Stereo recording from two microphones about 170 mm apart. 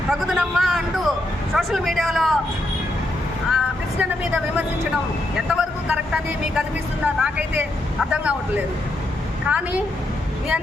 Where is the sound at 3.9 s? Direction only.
5° right (ahead or behind).